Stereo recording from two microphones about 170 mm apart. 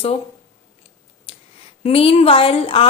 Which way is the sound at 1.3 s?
35° left (ahead or behind).